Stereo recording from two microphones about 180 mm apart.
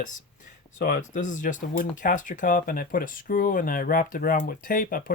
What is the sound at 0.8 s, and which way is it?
Speech, 50° left (ahead or behind).